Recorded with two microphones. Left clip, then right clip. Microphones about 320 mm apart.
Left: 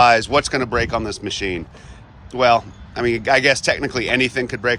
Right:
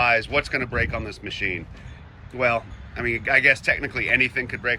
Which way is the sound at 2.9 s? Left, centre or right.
Left.